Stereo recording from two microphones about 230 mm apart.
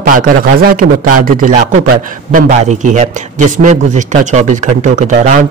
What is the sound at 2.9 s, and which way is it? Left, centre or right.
Speech, right.